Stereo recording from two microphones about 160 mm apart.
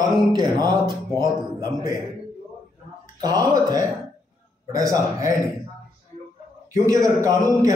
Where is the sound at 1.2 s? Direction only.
25° right (ahead or behind).